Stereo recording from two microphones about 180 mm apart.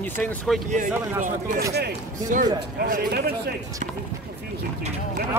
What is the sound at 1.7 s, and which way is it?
Speech, 65° right (ahead or behind).